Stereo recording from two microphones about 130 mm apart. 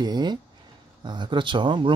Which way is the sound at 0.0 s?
35° right (ahead or behind).